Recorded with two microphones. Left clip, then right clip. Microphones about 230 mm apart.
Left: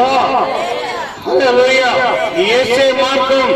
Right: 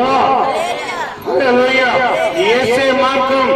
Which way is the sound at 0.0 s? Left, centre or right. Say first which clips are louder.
Left 1 dB; left.